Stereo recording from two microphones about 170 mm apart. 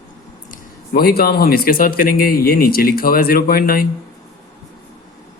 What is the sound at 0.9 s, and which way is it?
Speech, 65° left (ahead or behind).